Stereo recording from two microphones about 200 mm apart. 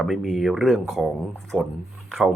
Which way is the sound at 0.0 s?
Centre (ahead or behind).